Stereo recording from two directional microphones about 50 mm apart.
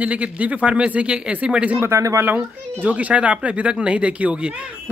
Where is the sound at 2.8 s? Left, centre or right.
Right.